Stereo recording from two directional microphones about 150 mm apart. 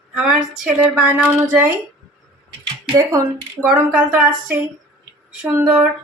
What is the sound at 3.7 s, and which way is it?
Speech, 10° right (ahead or behind).